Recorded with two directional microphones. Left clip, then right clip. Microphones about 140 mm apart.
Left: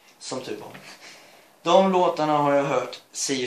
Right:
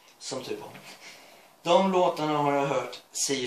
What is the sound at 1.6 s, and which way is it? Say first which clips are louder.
Speech: left 4 dB; 15° right (ahead or behind).